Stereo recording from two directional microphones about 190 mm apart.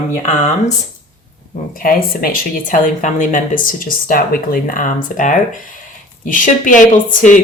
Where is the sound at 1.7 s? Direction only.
50° left (ahead or behind).